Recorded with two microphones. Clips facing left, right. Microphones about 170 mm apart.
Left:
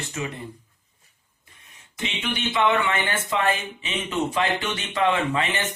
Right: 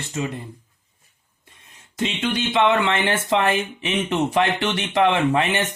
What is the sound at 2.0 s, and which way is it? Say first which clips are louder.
Speech: right 6 dB; 90° right.